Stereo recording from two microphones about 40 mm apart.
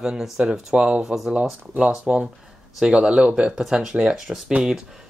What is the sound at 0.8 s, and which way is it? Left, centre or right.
Speech, right.